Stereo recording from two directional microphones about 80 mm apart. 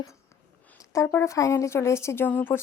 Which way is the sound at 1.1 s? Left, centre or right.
Left.